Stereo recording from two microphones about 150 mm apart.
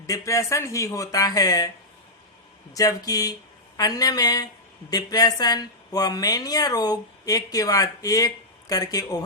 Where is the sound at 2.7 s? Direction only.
25° left (ahead or behind).